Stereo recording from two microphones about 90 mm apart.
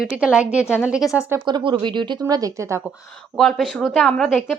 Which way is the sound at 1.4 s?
55° right (ahead or behind).